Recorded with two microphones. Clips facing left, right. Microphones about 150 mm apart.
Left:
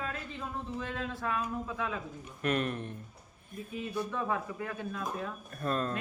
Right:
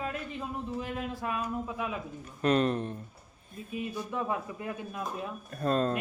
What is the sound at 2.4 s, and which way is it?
Speech, 30° right (ahead or behind).